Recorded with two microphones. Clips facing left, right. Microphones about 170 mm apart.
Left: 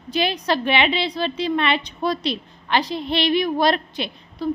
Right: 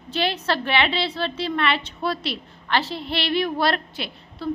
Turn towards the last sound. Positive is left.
turn(degrees=20)  # may be behind; listen again after turning